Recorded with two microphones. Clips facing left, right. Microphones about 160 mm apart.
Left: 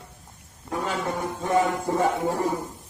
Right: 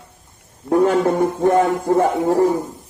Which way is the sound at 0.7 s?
60° right (ahead or behind).